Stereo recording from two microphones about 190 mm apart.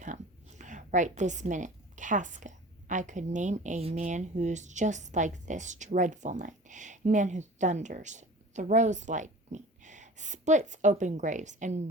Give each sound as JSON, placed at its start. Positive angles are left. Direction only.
{"t": 0.6, "sound": "a woman's voice", "side_deg": -40}